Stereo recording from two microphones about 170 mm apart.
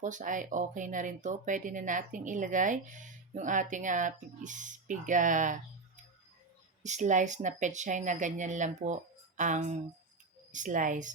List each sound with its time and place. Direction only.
0.0 s speech: 50° right (ahead or behind)
6.8 s speech: 45° right (ahead or behind)